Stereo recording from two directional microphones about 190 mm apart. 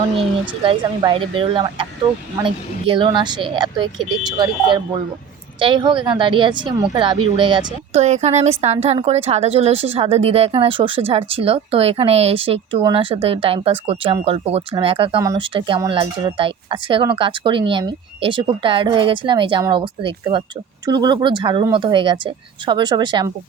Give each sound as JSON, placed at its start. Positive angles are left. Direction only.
{"t": 0.2, "sound": "speech", "side_deg": -30}
{"t": 8.0, "sound": "a woman's voice", "side_deg": -35}